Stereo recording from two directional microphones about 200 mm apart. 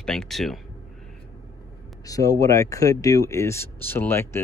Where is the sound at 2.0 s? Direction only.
15° left (ahead or behind).